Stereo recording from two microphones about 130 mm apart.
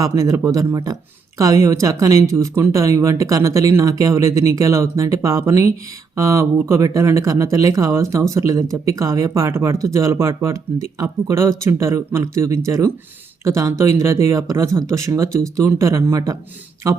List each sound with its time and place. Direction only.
0.0 s speech: 25° right (ahead or behind)